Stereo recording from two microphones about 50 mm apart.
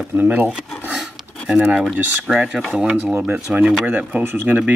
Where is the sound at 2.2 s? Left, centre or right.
Centre.